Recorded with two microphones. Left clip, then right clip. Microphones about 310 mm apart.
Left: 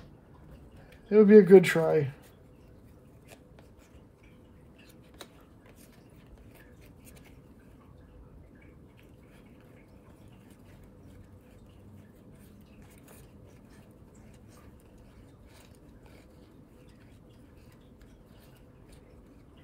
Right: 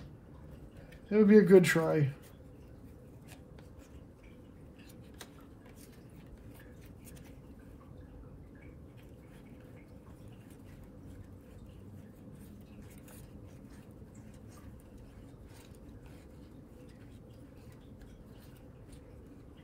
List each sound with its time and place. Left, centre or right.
1.1 s speech: left